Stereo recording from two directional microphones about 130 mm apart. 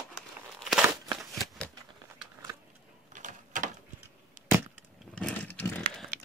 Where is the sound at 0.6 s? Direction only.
Centre (ahead or behind).